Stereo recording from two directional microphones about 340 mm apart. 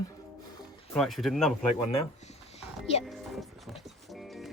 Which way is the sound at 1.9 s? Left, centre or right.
Centre.